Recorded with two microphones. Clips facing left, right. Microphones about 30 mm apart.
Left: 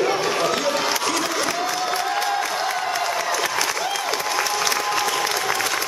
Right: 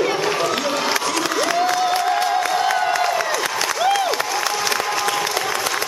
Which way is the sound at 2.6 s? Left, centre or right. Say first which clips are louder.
Right 5 dB; right.